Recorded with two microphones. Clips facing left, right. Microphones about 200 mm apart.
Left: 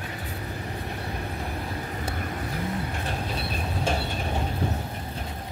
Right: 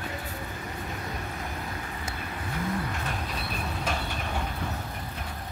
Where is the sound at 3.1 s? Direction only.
30° left (ahead or behind).